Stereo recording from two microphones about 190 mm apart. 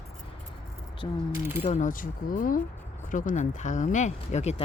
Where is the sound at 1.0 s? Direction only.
25° left (ahead or behind).